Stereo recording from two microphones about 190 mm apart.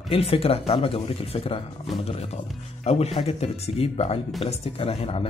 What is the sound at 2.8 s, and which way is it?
Speech, 35° left (ahead or behind).